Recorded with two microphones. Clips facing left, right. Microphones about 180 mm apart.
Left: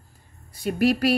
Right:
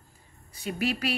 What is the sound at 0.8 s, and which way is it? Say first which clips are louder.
Speech: left 9 dB; 40° left (ahead or behind).